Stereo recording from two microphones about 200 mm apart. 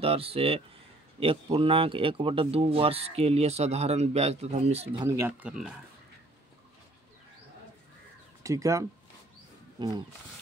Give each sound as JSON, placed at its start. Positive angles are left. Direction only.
{"t": 0.0, "sound": "speech", "side_deg": -30}
{"t": 5.0, "sound": "speech", "side_deg": -15}
{"t": 5.5, "sound": "speech", "side_deg": -5}
{"t": 8.4, "sound": "speech", "side_deg": -15}